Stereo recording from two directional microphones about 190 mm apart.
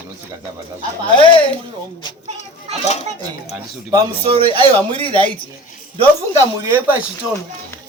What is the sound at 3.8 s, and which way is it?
Speech, 25° right (ahead or behind).